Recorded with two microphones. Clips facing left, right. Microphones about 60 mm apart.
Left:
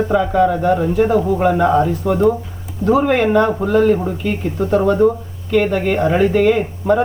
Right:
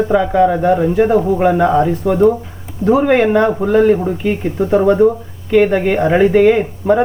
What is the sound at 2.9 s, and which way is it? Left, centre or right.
Speech, centre.